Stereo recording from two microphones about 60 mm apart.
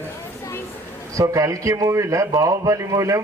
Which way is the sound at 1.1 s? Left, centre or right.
Right.